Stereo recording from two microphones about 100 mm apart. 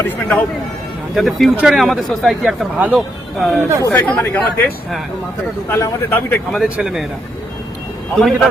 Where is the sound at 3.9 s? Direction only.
10° left (ahead or behind).